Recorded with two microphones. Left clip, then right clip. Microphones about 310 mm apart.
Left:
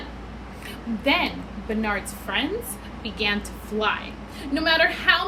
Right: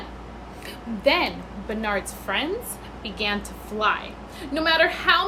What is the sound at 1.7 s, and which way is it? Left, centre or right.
A woman's voice, centre.